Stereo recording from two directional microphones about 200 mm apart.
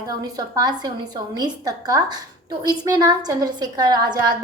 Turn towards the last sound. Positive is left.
turn(degrees=-20)  # may be behind; listen again after turning